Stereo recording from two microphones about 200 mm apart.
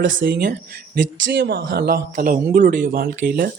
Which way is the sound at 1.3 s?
55° right (ahead or behind).